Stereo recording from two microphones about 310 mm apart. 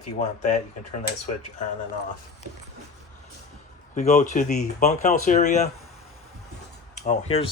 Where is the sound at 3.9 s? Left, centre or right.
Left.